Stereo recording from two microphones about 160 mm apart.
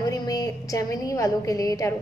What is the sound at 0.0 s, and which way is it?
A woman's voice, 25° left (ahead or behind).